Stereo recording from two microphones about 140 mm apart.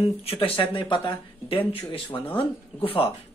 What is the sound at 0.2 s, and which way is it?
Speech, 45° left (ahead or behind).